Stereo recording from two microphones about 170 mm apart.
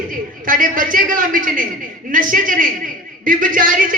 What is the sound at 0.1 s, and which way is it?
A man's voice, 55° right (ahead or behind).